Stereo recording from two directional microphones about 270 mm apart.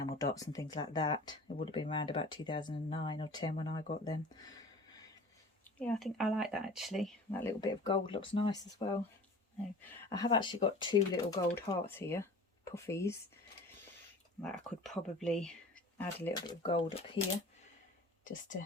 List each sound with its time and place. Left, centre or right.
0.0 s speech: centre
5.8 s speech: centre
10.1 s speech: centre
14.4 s speech: centre
18.3 s speech: left